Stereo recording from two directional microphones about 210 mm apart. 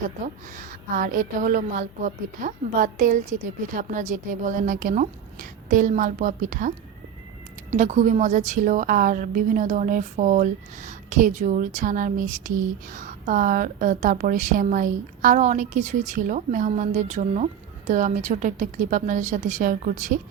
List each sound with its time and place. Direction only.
0.5 s a woman's voice: 40° right (ahead or behind)